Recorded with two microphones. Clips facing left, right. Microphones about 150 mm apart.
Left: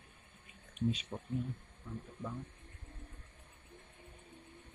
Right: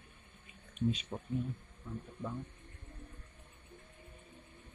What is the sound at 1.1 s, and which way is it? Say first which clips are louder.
Speech: right 1 dB; 30° right (ahead or behind).